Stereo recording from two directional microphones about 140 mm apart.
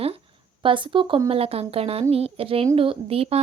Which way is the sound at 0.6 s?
35° right (ahead or behind).